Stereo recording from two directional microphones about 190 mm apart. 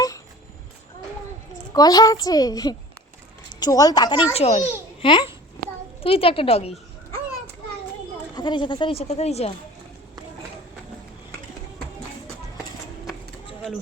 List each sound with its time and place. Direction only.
1.7 s a child's voice: 20° left (ahead or behind)
8.4 s a child's voice: 25° left (ahead or behind)